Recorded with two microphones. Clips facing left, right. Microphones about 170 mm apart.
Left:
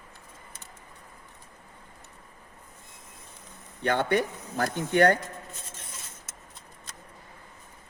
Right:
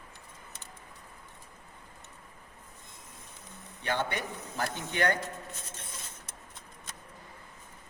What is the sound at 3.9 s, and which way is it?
Speech, 50° left (ahead or behind).